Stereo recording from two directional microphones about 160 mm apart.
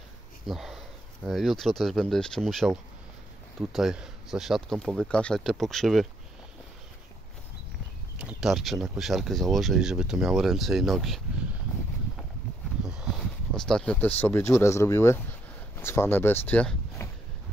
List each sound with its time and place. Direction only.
0.5 s speech: centre (ahead or behind)
8.2 s speech: 5° right (ahead or behind)
13.5 s speech: 5° left (ahead or behind)